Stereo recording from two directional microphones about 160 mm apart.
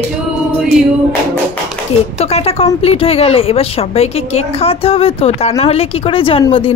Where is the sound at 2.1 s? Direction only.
40° left (ahead or behind).